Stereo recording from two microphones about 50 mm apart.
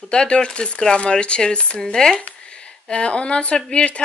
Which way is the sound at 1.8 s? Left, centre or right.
Centre.